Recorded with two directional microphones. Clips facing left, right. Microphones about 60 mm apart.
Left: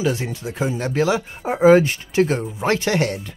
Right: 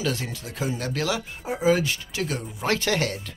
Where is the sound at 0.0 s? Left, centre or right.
Left.